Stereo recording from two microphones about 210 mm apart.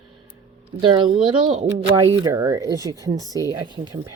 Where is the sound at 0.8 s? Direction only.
25° right (ahead or behind).